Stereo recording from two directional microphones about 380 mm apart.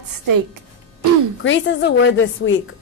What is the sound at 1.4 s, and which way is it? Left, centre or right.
A woman's voice, left.